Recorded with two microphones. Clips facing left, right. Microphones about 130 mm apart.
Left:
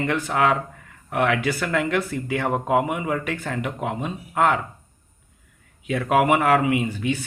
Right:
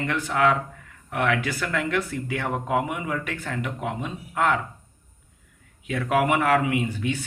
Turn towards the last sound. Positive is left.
turn(degrees=10)  # may be behind; listen again after turning